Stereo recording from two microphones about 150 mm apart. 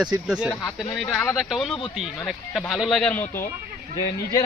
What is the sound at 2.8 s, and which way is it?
Speech, centre (ahead or behind).